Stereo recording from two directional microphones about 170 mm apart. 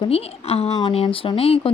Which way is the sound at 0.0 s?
35° left (ahead or behind).